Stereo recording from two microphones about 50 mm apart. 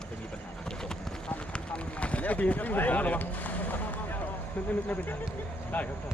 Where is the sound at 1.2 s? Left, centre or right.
Left.